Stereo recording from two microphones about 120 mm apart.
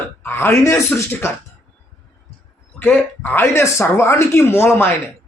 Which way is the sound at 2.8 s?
15° left (ahead or behind).